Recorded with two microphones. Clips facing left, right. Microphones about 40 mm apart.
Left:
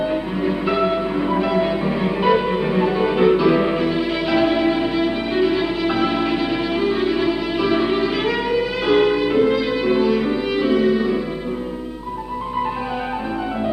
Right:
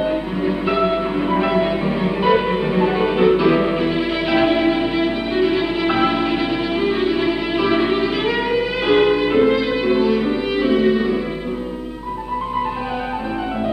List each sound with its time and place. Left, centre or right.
0.0 s music: centre
1.3 s music: right
2.0 s music: centre
5.9 s music: right
9.8 s music: centre